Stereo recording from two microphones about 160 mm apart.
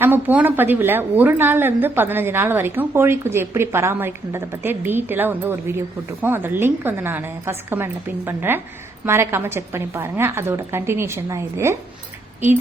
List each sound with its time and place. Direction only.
0.0 s a woman's voice: 10° right (ahead or behind)